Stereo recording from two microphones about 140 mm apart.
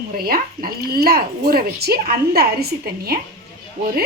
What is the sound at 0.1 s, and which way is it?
A woman's voice, 90° right.